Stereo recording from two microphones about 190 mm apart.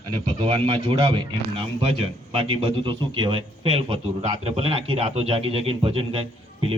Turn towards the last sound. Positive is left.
turn(degrees=-30)  # may be behind; listen again after turning